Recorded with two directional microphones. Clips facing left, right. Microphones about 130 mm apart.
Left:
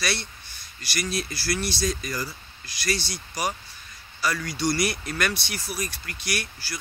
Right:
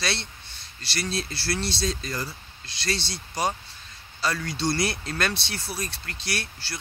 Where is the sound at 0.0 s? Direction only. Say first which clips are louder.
Left 1 dB; 25° right (ahead or behind).